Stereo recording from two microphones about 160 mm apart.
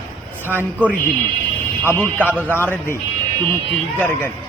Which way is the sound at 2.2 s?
10° right (ahead or behind).